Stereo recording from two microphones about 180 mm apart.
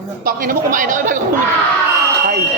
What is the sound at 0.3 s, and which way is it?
Speech, 50° right (ahead or behind).